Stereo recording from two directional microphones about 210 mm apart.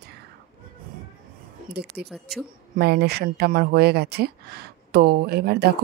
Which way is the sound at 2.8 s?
50° right (ahead or behind).